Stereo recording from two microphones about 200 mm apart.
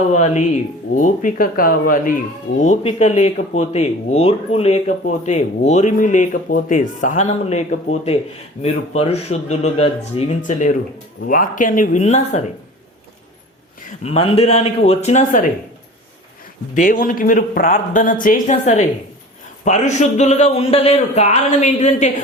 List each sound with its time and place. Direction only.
0.1 s speech: 35° left (ahead or behind)
14.0 s speech: 30° left (ahead or behind)
16.7 s speech: 40° left (ahead or behind)